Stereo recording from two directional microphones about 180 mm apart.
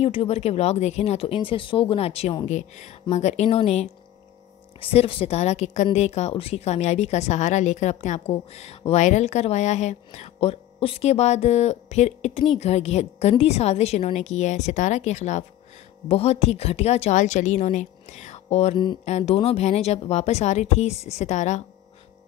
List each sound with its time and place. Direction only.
0.0 s a woman's voice: 30° left (ahead or behind)